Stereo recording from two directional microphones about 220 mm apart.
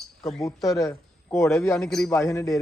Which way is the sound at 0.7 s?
15° left (ahead or behind).